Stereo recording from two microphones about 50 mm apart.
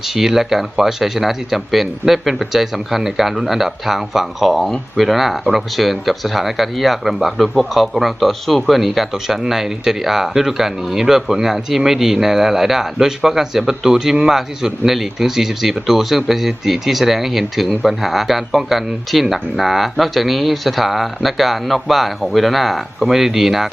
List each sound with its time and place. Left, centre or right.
0.0 s speech: centre